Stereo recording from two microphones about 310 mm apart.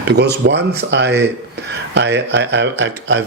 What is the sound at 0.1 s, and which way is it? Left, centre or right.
Speech, right.